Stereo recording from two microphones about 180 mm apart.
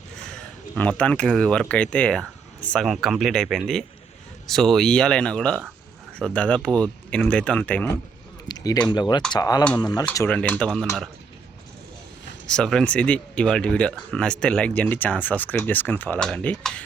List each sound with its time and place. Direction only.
0.8 s speech: 5° left (ahead or behind)
8.4 s speech: 20° left (ahead or behind)
10.2 s speech: 10° left (ahead or behind)
12.5 s speech: 5° left (ahead or behind)